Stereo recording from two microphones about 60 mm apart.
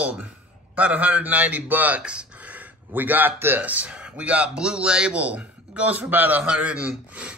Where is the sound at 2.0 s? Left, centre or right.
Centre.